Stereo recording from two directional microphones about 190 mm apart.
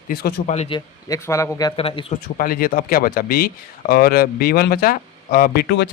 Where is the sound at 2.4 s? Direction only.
50° left (ahead or behind).